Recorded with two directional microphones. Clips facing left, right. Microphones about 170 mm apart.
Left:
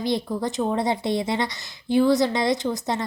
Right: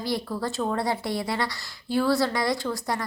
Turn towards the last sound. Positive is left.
turn(degrees=20)  # may be behind; listen again after turning